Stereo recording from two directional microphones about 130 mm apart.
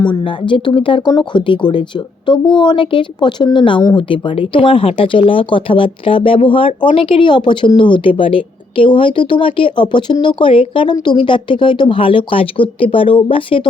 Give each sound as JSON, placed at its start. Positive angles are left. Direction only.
{"t": 0.0, "sound": "speech", "side_deg": 35}